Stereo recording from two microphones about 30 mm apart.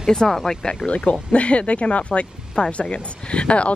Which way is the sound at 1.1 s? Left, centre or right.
Left.